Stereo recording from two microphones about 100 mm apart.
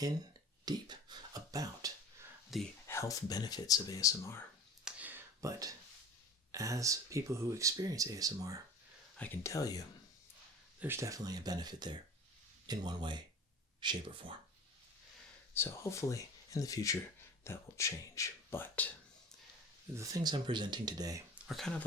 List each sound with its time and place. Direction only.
0.6 s speech: 45° right (ahead or behind)
2.8 s speech: 30° left (ahead or behind)
4.9 s a sound: 15° right (ahead or behind)
5.4 s speech: 35° right (ahead or behind)
9.1 s speech: 15° left (ahead or behind)
9.4 s speech: 35° left (ahead or behind)
10.8 s speech: 20° right (ahead or behind)
11.0 s speech: 35° right (ahead or behind); by 14.3 s 55° right (ahead or behind)
15.5 s speech: 25° left (ahead or behind)
20.0 s speech: 40° right (ahead or behind)
21.4 s speech: centre (ahead or behind)